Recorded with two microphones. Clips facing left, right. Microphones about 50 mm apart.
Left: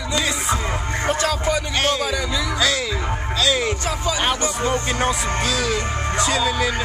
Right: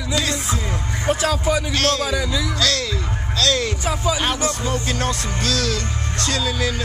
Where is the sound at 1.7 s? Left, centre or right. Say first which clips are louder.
Even; centre.